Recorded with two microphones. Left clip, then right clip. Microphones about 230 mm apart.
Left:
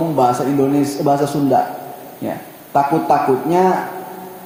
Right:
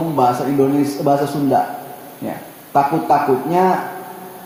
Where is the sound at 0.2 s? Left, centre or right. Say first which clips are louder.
Even; left.